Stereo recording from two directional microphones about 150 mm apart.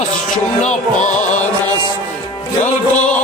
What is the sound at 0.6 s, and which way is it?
Music, 50° left (ahead or behind).